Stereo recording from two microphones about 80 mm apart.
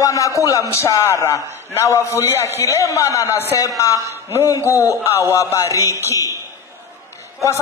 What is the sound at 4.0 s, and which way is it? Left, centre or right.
Speech, right.